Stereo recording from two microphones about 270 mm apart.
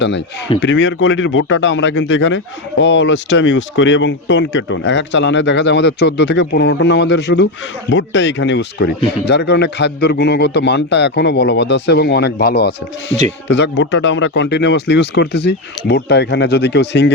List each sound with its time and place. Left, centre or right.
0.0 s a man's voice: left